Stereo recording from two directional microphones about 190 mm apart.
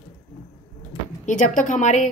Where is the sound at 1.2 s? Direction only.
40° left (ahead or behind).